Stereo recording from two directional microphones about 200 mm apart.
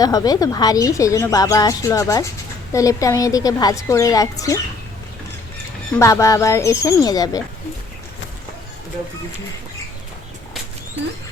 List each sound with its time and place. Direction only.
0.0 s a woman's voice: 20° left (ahead or behind)
6.0 s a woman's voice: 15° left (ahead or behind)